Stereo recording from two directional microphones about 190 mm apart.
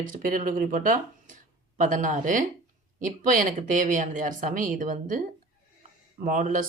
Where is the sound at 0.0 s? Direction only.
45° right (ahead or behind).